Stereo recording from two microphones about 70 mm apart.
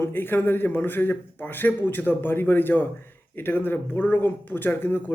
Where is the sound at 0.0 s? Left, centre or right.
Left.